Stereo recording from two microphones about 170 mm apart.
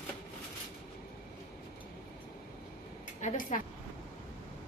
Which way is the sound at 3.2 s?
50° left (ahead or behind).